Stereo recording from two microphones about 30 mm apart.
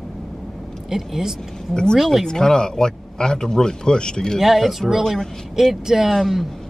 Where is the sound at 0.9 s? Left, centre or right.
Centre.